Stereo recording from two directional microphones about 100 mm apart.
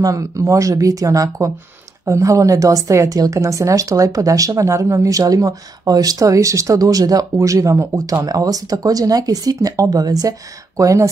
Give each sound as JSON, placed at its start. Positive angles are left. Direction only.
{"t": 0.0, "sound": "a woman's voice", "side_deg": -35}